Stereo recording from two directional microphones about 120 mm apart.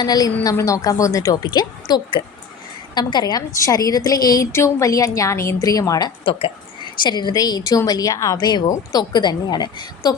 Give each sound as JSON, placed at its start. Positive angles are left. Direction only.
{"t": 0.0, "sound": "a woman's voice", "side_deg": 35}